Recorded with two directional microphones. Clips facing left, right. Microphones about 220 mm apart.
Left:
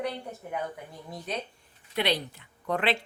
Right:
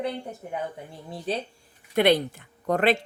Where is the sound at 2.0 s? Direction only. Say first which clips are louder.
Right 8 dB; 50° right (ahead or behind).